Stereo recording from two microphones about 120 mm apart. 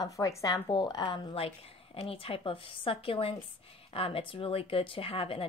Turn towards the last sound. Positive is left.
turn(degrees=50)  # may be behind; listen again after turning